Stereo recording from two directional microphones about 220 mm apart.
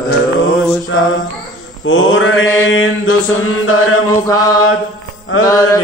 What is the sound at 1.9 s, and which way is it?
Mantra, 60° left (ahead or behind).